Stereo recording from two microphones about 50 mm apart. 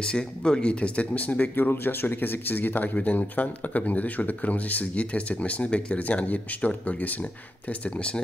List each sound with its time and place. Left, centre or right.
0.0 s speech: centre; by 1.5 s left
1.5 s speech: left